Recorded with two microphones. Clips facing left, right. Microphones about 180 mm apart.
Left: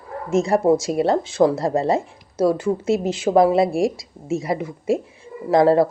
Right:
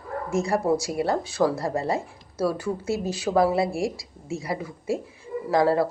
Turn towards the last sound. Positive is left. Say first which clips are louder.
# left 6 dB
turn(degrees=20)  # may be behind; listen again after turning